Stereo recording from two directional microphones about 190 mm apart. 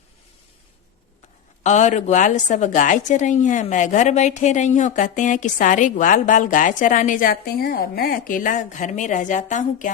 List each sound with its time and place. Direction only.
1.6 s a woman's voice: 40° left (ahead or behind)